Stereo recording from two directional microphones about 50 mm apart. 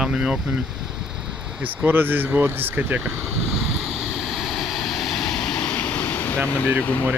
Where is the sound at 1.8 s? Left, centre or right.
Right.